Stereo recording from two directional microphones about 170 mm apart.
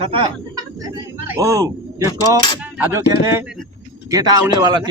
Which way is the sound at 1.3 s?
20° right (ahead or behind).